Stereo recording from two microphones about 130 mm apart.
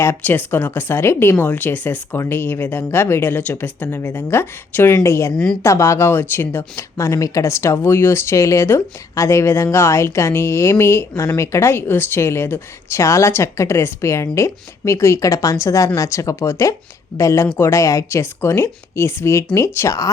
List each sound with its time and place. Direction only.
0.0 s speech: 15° left (ahead or behind)
5.3 s speech: 5° left (ahead or behind)
5.6 s speech: 20° left (ahead or behind)